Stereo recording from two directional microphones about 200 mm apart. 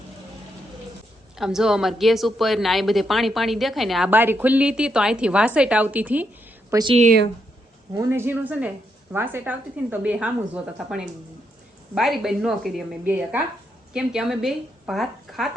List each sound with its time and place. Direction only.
1.4 s a woman's voice: centre (ahead or behind)
6.7 s a woman's voice: 20° right (ahead or behind)
7.9 s a woman's voice: 10° right (ahead or behind)